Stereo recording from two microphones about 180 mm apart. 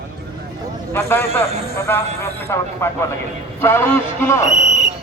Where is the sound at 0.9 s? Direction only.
15° left (ahead or behind).